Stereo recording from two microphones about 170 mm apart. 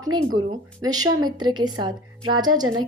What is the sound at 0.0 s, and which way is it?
A woman's voice, 25° right (ahead or behind).